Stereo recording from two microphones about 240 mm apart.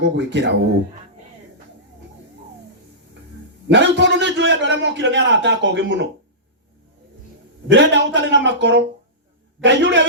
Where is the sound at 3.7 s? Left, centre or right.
Right.